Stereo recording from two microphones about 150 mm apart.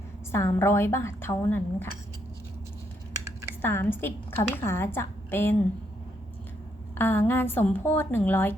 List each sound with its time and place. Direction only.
0.3 s a woman's voice: 15° left (ahead or behind)
3.6 s a woman's voice: 15° left (ahead or behind)
7.0 s a woman's voice: 15° left (ahead or behind)